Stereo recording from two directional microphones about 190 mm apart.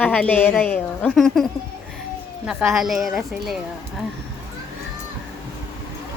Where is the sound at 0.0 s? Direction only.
5° left (ahead or behind).